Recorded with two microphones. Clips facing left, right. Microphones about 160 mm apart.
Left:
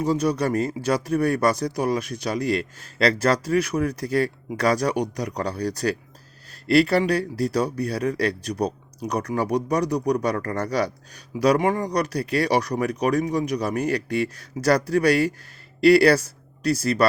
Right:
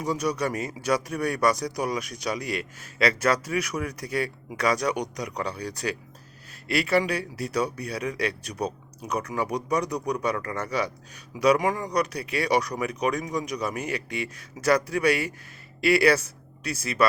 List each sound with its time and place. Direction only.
0.0 s speech: 30° left (ahead or behind)